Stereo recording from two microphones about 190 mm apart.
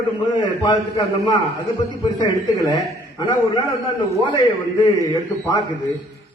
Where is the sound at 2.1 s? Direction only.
20° left (ahead or behind).